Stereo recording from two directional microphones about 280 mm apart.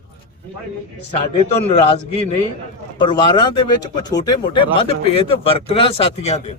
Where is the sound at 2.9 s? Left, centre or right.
Centre.